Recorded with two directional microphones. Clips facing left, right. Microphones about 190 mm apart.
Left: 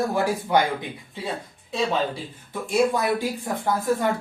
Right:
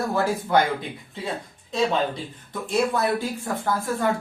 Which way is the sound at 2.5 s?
10° left (ahead or behind).